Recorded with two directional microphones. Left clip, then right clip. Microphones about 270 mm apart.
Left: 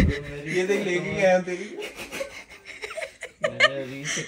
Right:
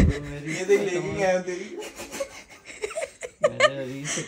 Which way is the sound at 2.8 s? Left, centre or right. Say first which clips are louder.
Right 3 dB; centre.